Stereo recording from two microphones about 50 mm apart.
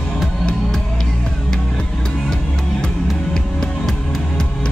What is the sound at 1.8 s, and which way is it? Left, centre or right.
Music, centre.